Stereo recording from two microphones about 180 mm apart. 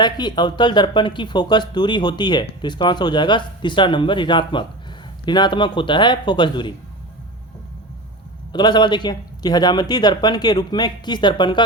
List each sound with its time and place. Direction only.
0.0 s speech: 25° left (ahead or behind)
8.5 s speech: 25° left (ahead or behind)